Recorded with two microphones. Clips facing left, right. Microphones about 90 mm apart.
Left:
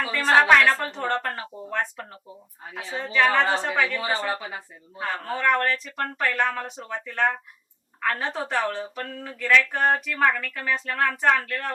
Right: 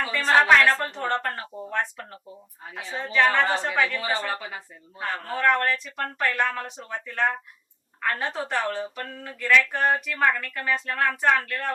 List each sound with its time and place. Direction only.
0.0 s a sound: 5° left (ahead or behind)
0.8 s speech: centre (ahead or behind)
4.3 s speech: 15° left (ahead or behind)
5.0 s speech: centre (ahead or behind)